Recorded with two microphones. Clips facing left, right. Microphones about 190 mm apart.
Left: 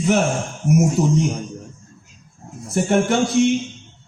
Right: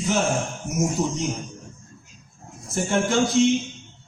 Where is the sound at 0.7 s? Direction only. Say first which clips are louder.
Left 8 dB; 60° left (ahead or behind).